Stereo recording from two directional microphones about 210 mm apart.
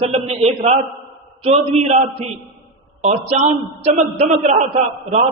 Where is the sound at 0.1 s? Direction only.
30° right (ahead or behind).